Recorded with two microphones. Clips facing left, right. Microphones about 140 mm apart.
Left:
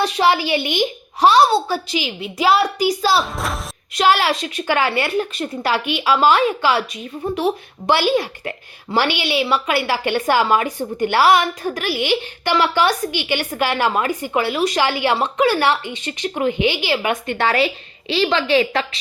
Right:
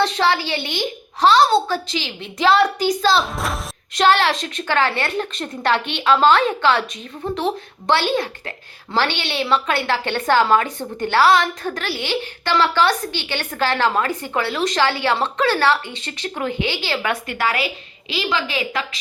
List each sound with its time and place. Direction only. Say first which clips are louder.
0.0 s a woman's voice: left 2 dB; 15° left (ahead or behind); by 18.9 s 35° left (ahead or behind)